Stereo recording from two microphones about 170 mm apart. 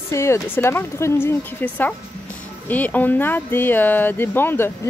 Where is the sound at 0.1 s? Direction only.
15° left (ahead or behind).